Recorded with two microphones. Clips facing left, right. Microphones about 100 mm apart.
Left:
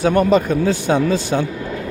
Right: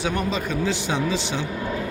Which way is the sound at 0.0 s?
50° left (ahead or behind).